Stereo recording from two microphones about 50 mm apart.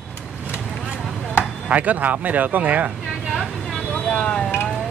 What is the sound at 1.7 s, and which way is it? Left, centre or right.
Speech, right.